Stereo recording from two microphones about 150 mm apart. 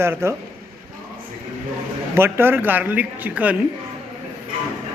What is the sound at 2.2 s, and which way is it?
A man's voice, 15° right (ahead or behind).